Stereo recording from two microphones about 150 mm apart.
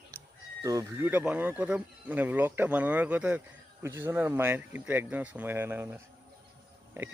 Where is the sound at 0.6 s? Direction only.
20° right (ahead or behind).